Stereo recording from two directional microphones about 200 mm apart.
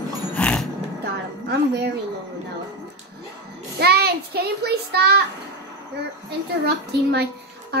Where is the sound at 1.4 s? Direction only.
55° right (ahead or behind).